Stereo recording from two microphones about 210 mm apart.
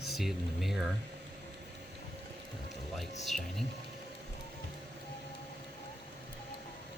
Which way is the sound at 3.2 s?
Centre (ahead or behind).